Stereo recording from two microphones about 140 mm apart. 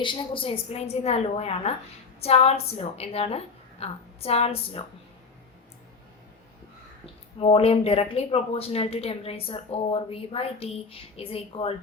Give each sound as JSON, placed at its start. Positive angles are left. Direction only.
{"t": 0.0, "sound": "speech", "side_deg": 35}
{"t": 7.0, "sound": "speech", "side_deg": 45}